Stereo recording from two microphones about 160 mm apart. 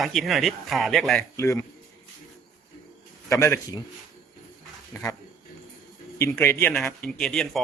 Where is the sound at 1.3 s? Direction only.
20° left (ahead or behind).